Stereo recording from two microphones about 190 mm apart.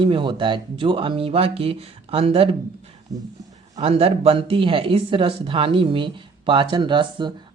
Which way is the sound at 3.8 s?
30° right (ahead or behind).